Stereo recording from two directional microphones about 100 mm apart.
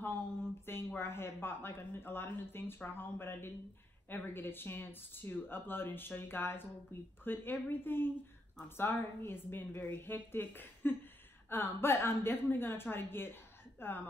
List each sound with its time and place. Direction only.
0.7 s speech: 25° left (ahead or behind)